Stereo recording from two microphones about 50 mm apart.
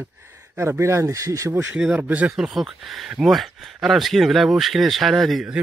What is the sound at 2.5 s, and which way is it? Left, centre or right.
Speech, centre.